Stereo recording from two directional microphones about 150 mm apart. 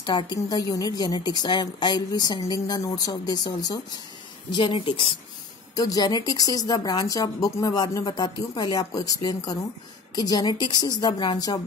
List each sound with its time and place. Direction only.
0.0 s a woman's voice: 30° left (ahead or behind)
5.8 s a woman's voice: 25° left (ahead or behind)